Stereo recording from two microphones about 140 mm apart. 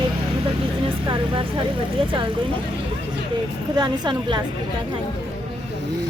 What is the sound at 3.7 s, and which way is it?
Speech, 30° right (ahead or behind).